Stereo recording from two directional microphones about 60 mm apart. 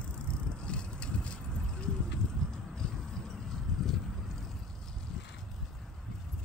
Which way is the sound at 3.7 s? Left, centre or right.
Centre.